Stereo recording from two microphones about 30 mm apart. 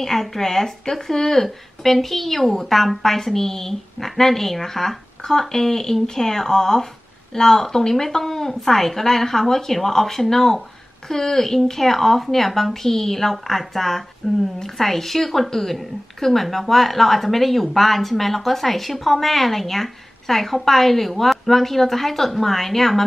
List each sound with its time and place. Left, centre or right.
0.0 s a woman's voice: centre